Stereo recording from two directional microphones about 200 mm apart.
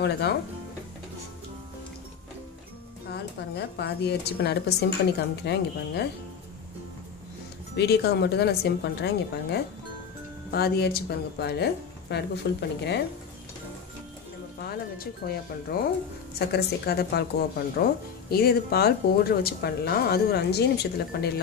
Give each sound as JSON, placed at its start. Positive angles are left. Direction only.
{"t": 0.0, "sound": "speech", "side_deg": 55}
{"t": 3.1, "sound": "speech", "side_deg": 55}
{"t": 7.7, "sound": "speech", "side_deg": 55}
{"t": 15.2, "sound": "speech", "side_deg": 45}